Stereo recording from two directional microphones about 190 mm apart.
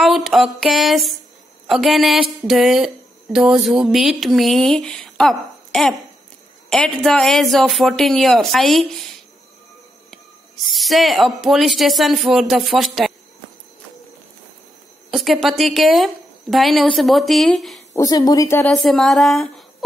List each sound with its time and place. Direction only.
0.0 s a woman's voice: centre (ahead or behind)
10.7 s a woman's voice: centre (ahead or behind)
15.0 s a woman's voice: centre (ahead or behind)
17.9 s speech: 20° left (ahead or behind)
18.7 s a woman's voice: centre (ahead or behind)